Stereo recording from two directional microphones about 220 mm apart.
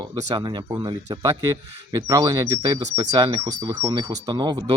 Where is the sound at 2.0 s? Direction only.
15° right (ahead or behind).